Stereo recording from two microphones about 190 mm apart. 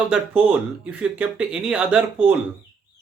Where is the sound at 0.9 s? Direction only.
5° right (ahead or behind).